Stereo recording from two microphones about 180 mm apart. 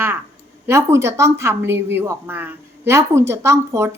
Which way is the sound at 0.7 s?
15° right (ahead or behind).